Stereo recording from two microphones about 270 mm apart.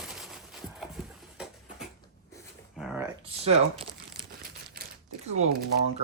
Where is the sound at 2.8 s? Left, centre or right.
Centre.